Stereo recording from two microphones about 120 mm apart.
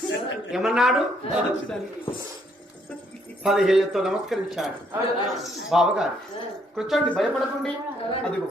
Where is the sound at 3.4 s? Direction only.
Centre (ahead or behind).